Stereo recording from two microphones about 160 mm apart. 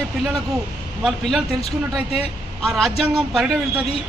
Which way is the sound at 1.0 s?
Centre (ahead or behind).